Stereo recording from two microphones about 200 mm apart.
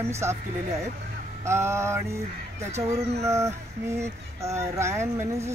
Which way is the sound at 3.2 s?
15° right (ahead or behind).